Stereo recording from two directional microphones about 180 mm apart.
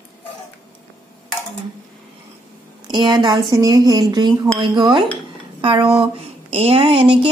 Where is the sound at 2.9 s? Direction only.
25° right (ahead or behind).